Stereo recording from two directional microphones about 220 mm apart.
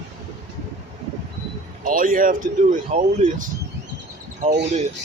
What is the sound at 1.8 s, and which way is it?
Speech, 40° right (ahead or behind).